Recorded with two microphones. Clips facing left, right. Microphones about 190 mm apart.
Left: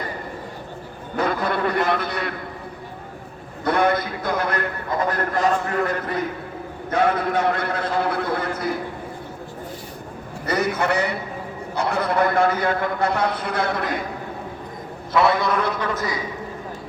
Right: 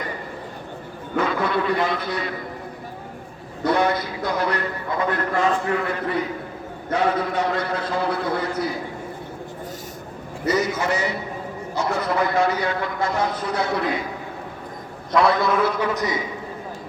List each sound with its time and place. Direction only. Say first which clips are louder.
1.1 s a man's voice: right 1 dB; 40° left (ahead or behind); by 2.3 s 60° left (ahead or behind)
3.6 s a man's voice: left 1 dB; 55° left (ahead or behind)
6.9 s a man's voice: left 1 dB; 55° left (ahead or behind)
10.4 s a man's voice: even; 60° left (ahead or behind)
15.1 s a man's voice: even; 5° left (ahead or behind)
15.6 s a man's voice: right 3 dB; 10° right (ahead or behind)